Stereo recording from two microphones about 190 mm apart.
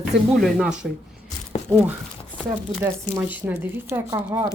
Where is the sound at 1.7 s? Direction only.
10° left (ahead or behind).